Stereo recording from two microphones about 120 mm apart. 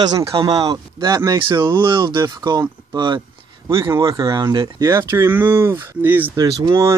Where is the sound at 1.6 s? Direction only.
20° right (ahead or behind).